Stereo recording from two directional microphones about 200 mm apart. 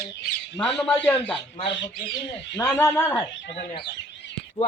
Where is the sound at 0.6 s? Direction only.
5° left (ahead or behind).